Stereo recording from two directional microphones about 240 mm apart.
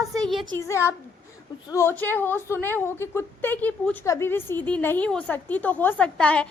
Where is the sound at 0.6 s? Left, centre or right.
Centre.